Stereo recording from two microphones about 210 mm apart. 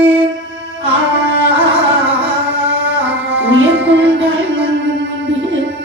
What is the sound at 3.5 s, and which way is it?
Music, 60° right (ahead or behind).